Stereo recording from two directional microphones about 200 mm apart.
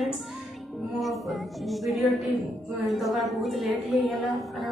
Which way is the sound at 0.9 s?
Centre (ahead or behind).